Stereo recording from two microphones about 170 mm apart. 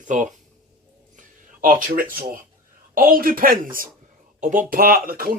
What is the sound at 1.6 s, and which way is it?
Speech, 50° right (ahead or behind).